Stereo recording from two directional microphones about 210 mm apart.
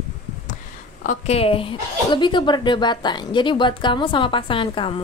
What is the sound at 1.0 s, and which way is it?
A woman's voice, 30° left (ahead or behind).